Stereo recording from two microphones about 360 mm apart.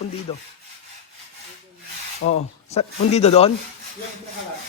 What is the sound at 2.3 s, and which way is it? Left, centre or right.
Speech, centre.